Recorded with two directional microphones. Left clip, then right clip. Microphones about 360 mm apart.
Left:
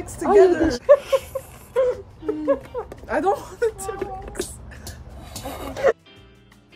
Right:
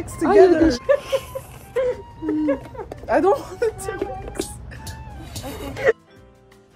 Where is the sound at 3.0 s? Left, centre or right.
Centre.